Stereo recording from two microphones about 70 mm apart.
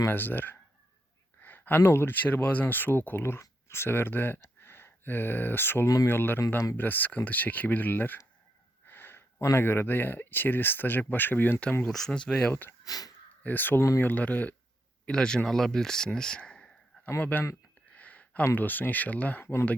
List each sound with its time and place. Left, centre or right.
0.1 s speech: left
1.4 s a sound: left
1.8 s speech: left
8.9 s gasp: left
9.5 s speech: left
11.9 s speech: centre
12.4 s speech: left
12.8 s a sound: left
13.4 s speech: left
15.0 s speech: centre
17.2 s speech: left
17.9 s a sound: left
18.5 s speech: left